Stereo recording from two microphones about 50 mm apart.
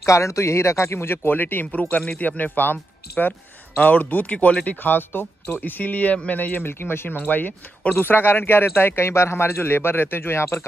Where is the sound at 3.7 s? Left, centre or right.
Left.